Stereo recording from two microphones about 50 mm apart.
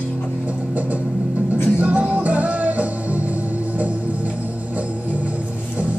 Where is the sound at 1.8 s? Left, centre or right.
Right.